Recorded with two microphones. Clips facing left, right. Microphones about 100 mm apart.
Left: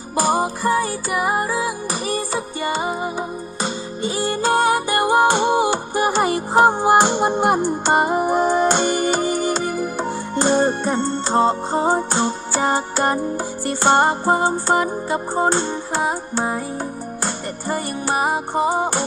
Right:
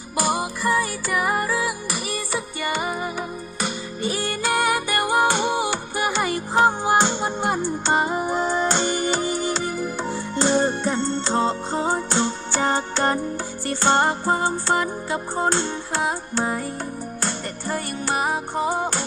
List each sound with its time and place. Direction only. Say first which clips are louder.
0.1 s music: left 5 dB; 35° left (ahead or behind)
1.1 s music: left 2 dB; 25° left (ahead or behind)